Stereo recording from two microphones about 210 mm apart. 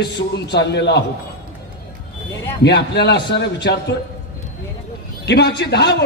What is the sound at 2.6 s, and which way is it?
A man's voice, 55° left (ahead or behind).